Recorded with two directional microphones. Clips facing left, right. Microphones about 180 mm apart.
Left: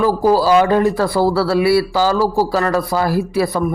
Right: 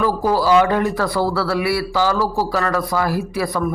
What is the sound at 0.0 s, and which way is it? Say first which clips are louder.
A man's voice: left 4 dB; 30° left (ahead or behind).